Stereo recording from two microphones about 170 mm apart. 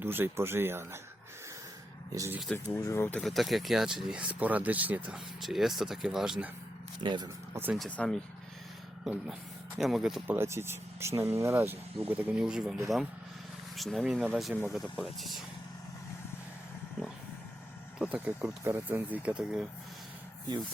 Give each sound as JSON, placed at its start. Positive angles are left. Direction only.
{"t": 0.0, "sound": "speech", "side_deg": -15}
{"t": 2.1, "sound": "speech", "side_deg": -15}
{"t": 2.7, "sound": "speech", "side_deg": 15}
{"t": 3.2, "sound": "speech", "side_deg": 0}
{"t": 7.0, "sound": "speech", "side_deg": -25}
{"t": 7.5, "sound": "speech", "side_deg": -10}
{"t": 7.8, "sound": "speech", "side_deg": 5}
{"t": 9.7, "sound": "speech", "side_deg": 0}
{"t": 10.3, "sound": "speech", "side_deg": -15}
{"t": 18.0, "sound": "speech", "side_deg": -5}